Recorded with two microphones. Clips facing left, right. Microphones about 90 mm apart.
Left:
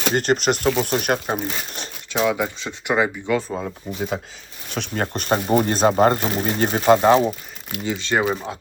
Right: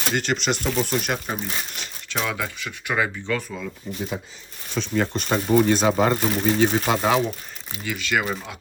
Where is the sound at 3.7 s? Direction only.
60° left (ahead or behind); by 7.2 s 40° left (ahead or behind).